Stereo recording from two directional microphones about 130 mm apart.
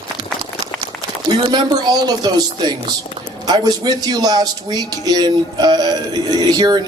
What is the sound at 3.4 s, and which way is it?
A man's voice, 30° right (ahead or behind).